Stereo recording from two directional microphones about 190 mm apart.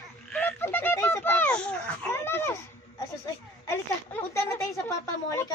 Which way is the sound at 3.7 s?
15° left (ahead or behind).